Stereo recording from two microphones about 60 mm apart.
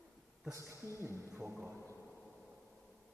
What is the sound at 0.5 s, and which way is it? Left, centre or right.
Speech, right.